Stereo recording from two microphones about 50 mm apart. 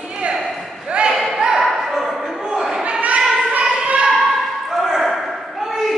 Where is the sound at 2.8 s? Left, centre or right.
Right.